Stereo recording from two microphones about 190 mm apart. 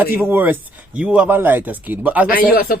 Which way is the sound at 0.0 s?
10° right (ahead or behind).